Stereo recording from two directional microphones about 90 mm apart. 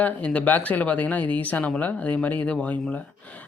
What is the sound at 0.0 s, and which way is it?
Speech, 15° left (ahead or behind).